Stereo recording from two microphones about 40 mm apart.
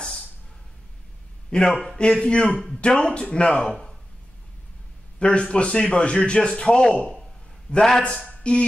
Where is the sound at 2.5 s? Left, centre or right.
Centre.